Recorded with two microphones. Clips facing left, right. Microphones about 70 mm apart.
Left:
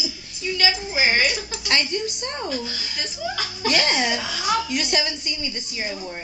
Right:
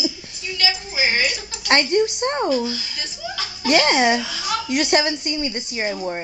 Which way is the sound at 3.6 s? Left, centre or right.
Right.